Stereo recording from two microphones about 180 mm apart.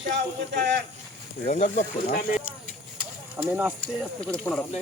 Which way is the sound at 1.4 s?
45° left (ahead or behind).